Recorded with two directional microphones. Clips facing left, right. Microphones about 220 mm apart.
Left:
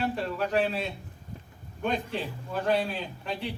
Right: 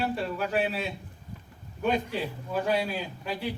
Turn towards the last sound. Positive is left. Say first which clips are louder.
# right 1 dB
turn(degrees=-10)  # may be behind; listen again after turning